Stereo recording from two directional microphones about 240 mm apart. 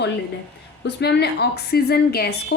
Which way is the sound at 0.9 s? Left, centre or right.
Left.